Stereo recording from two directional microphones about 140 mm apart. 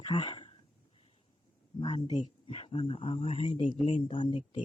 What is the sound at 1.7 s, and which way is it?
Speech, 35° left (ahead or behind).